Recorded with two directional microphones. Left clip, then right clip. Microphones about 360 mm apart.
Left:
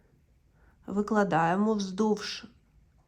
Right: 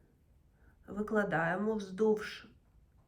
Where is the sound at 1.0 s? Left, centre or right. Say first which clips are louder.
Left 6 dB; centre.